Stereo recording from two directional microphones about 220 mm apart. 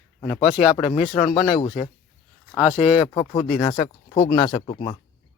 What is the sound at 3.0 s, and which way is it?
Speech, 20° left (ahead or behind).